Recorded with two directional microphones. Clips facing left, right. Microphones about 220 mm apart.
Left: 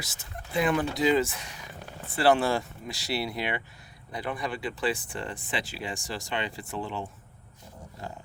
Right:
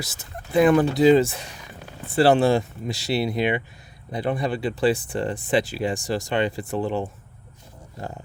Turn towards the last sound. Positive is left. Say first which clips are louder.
# right 9 dB
turn(degrees=-45)  # may be behind; listen again after turning